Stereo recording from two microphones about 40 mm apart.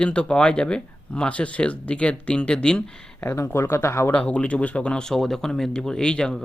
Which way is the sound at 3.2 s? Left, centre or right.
Left.